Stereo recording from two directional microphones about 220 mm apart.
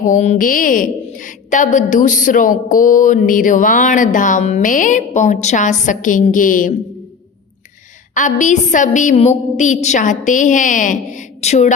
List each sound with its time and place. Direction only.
0.0 s a woman's voice: 35° left (ahead or behind)
8.1 s a woman's voice: 35° left (ahead or behind)